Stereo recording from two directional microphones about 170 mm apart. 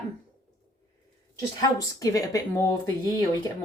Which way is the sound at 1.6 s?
20° left (ahead or behind).